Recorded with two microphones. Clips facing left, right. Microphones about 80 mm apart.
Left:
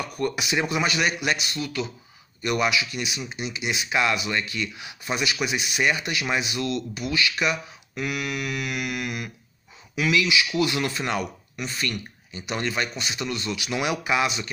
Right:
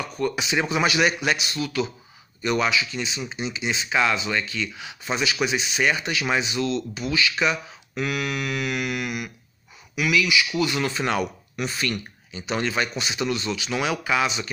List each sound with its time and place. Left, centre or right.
0.2 s speech: centre
2.4 s speech: centre
10.9 s speech: centre
13.6 s speech: centre